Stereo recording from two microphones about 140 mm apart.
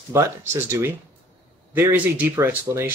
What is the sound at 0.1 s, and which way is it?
Speech, 20° right (ahead or behind).